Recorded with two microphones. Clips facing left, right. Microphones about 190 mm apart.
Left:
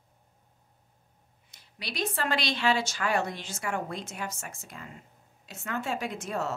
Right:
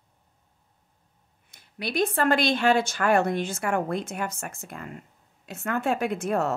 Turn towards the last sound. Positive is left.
turn(degrees=-55)  # may be behind; listen again after turning